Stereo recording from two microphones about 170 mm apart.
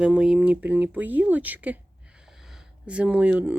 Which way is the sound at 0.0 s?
5° right (ahead or behind).